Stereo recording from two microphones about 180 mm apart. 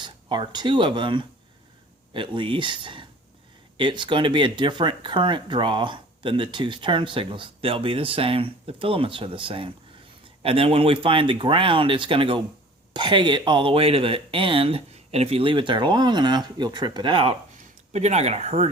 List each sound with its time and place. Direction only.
0.0 s speech: 25° right (ahead or behind)
17.9 s speech: 40° right (ahead or behind)